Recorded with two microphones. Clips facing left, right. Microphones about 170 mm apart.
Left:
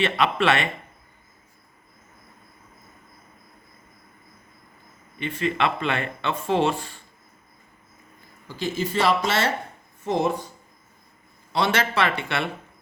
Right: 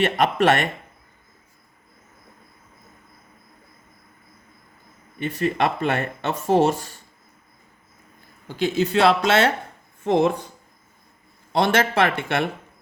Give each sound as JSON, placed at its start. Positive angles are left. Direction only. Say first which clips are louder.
{"t": 0.0, "sound": "speech", "louder": "right 3 dB", "side_deg": -45}
{"t": 5.2, "sound": "speech", "louder": "right 2 dB", "side_deg": -45}
{"t": 8.4, "sound": "speech", "louder": "right 5 dB", "side_deg": -65}
{"t": 10.0, "sound": "speech", "louder": "right 4 dB", "side_deg": -60}
{"t": 11.5, "sound": "speech", "louder": "right 4 dB", "side_deg": -50}